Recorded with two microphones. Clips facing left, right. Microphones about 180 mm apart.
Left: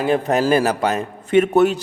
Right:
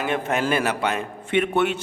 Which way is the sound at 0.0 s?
35° left (ahead or behind).